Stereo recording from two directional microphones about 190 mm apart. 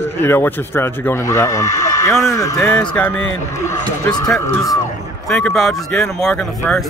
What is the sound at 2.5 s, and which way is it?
Speech, 5° left (ahead or behind).